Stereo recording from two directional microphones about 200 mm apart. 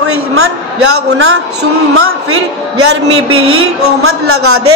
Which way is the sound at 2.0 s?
90° right.